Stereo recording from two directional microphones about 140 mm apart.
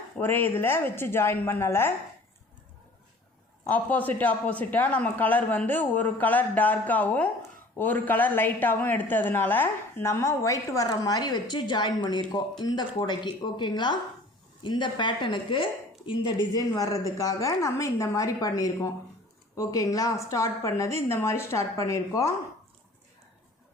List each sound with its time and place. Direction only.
0.2 s speech: 15° left (ahead or behind)
3.6 s a woman's voice: 10° left (ahead or behind)